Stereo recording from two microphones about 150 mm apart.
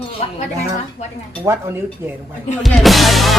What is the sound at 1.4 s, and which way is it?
Speech, 20° right (ahead or behind).